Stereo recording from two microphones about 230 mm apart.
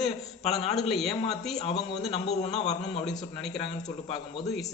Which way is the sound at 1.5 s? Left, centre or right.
Left.